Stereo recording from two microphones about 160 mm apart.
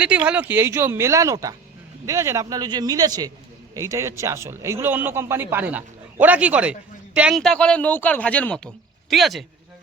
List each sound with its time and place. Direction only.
0.0 s a man's voice: 10° right (ahead or behind)